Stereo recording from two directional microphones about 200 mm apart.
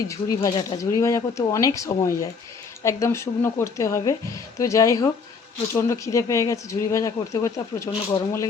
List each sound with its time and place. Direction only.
0.1 s speech: 20° left (ahead or behind)